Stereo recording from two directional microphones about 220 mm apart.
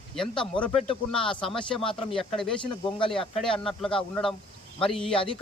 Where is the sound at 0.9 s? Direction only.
5° left (ahead or behind).